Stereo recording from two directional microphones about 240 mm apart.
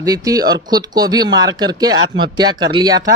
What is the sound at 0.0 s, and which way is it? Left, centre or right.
Speech, centre.